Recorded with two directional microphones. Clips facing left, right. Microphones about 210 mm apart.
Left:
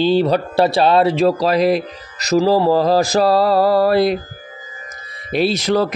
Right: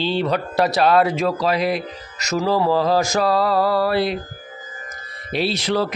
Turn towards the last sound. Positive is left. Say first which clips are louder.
# left 4 dB
turn(degrees=45)  # may be behind; listen again after turning